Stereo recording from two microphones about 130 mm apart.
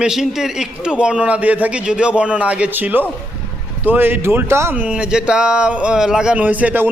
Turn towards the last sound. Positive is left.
turn(degrees=-15)  # may be behind; listen again after turning